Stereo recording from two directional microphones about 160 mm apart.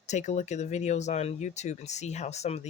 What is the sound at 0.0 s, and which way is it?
Speech, 45° left (ahead or behind).